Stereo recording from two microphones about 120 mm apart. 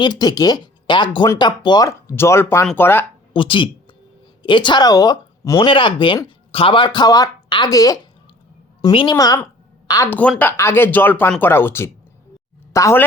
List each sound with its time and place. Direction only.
0.0 s speech: 35° left (ahead or behind)
1.9 s speech: 20° left (ahead or behind)
3.3 s speech: 45° left (ahead or behind); by 8.0 s 30° left (ahead or behind)
8.9 s speech: 45° left (ahead or behind)
9.1 s speech: 30° left (ahead or behind)
9.8 s a sound: 30° left (ahead or behind)
10.1 s speech: 15° left (ahead or behind)